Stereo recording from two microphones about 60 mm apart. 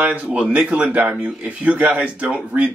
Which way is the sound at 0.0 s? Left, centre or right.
Right.